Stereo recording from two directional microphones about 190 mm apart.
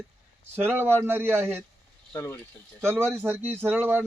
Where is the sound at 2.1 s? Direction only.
15° left (ahead or behind).